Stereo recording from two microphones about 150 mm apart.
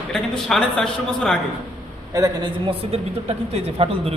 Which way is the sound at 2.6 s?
40° right (ahead or behind).